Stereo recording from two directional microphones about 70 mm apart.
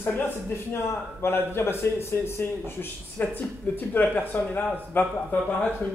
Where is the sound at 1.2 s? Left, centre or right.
Left.